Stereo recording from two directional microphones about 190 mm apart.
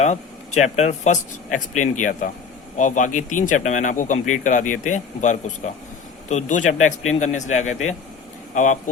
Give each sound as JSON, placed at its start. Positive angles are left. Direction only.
{"t": 0.0, "sound": "speech", "side_deg": 35}